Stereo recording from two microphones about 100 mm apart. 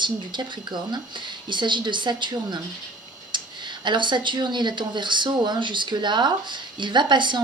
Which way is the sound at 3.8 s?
50° right (ahead or behind).